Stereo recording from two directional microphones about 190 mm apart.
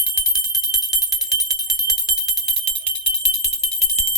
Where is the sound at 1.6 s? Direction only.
20° left (ahead or behind).